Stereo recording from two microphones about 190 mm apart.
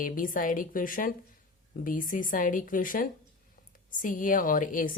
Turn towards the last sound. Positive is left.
turn(degrees=45)  # may be behind; listen again after turning